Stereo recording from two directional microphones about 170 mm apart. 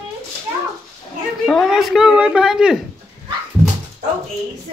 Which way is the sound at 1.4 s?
Centre (ahead or behind).